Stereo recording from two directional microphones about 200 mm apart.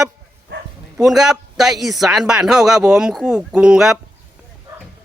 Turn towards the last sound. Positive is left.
turn(degrees=-5)  # may be behind; listen again after turning